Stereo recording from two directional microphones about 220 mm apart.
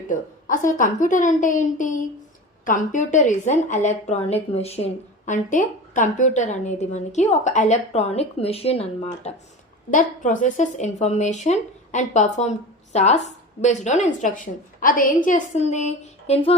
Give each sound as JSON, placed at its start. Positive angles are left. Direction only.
{"t": 0.1, "sound": "speech", "side_deg": 35}